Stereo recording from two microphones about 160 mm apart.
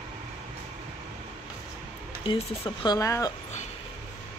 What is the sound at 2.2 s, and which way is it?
Speech, 30° left (ahead or behind).